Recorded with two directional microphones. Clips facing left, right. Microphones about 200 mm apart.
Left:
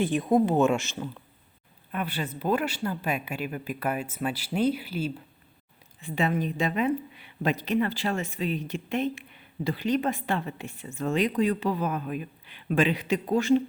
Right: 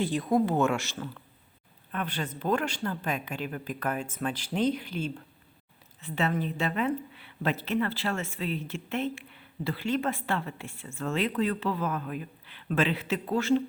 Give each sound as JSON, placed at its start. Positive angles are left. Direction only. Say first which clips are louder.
{"t": 0.0, "sound": "a woman's voice", "louder": "left 3 dB", "side_deg": 20}